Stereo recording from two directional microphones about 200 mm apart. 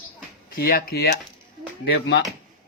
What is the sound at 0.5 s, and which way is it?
Speech, 50° left (ahead or behind).